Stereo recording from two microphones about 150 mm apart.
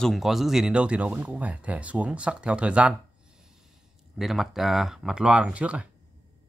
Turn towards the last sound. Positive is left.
turn(degrees=-10)  # may be behind; listen again after turning